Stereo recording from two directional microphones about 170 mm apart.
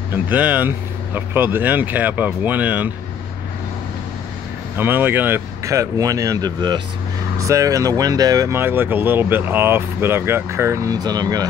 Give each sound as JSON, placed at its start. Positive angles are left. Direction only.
{"t": 0.1, "sound": "speech", "side_deg": -10}
{"t": 4.7, "sound": "speech", "side_deg": -10}